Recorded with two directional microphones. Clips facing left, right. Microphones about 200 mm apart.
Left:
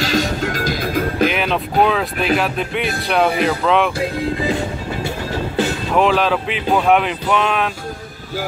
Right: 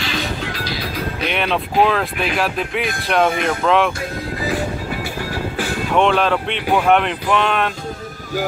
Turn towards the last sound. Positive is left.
turn(degrees=0)  # may be behind; listen again after turning